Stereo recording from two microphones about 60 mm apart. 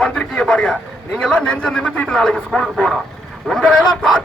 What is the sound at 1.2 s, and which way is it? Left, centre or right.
A man's voice, centre.